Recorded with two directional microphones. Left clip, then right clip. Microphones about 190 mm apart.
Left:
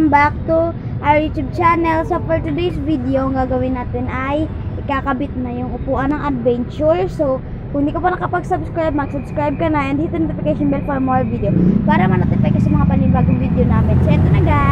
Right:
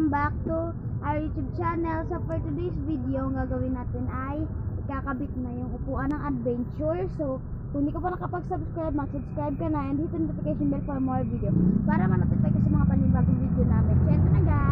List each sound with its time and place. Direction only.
0.1 s child singing: 25° left (ahead or behind)
6.0 s a woman's voice: 15° left (ahead or behind)
11.9 s child singing: 20° left (ahead or behind)